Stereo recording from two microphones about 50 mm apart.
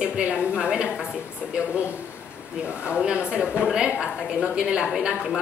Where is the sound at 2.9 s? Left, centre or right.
Right.